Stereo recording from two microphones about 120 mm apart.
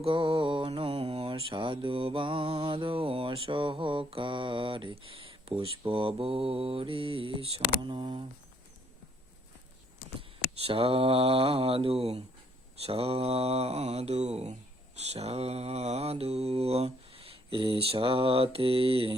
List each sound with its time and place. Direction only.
0.0 s mantra: 50° right (ahead or behind)
10.2 s mantra: 50° right (ahead or behind)